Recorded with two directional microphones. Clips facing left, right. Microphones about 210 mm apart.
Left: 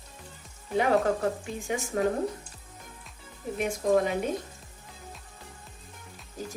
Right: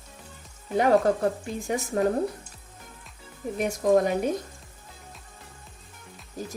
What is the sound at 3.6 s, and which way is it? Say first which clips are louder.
Speech: right 3 dB; 45° right (ahead or behind).